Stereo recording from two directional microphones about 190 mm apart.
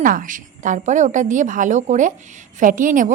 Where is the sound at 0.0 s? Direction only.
45° right (ahead or behind).